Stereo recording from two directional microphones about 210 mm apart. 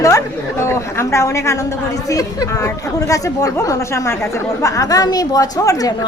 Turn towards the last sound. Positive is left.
turn(degrees=15)  # may be behind; listen again after turning